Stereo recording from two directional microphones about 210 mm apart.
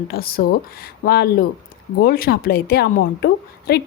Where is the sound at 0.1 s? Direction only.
45° left (ahead or behind).